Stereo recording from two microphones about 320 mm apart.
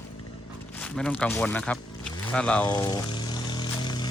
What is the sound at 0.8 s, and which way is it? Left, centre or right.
Speech, centre.